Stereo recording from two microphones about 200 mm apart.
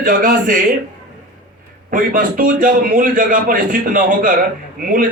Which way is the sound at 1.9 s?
45° right (ahead or behind).